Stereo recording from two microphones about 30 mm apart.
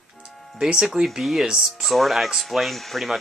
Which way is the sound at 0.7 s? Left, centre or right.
Centre.